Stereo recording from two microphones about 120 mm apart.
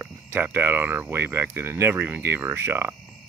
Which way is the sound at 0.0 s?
15° right (ahead or behind).